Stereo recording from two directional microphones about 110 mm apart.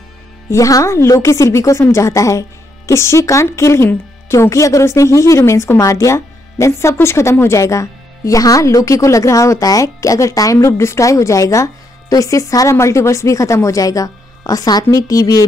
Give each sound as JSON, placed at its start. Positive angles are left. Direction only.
{"t": 0.5, "sound": "speech", "side_deg": 30}